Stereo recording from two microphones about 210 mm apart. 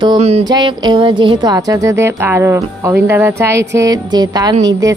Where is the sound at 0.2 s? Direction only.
30° right (ahead or behind).